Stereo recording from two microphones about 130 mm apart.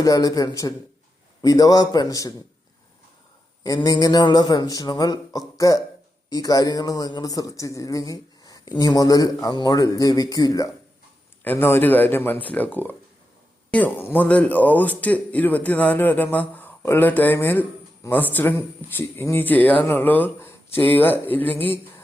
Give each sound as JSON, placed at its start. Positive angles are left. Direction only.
{"t": 0.0, "sound": "a man's voice", "side_deg": 25}
{"t": 3.8, "sound": "a man's voice", "side_deg": 30}
{"t": 11.4, "sound": "speech", "side_deg": 15}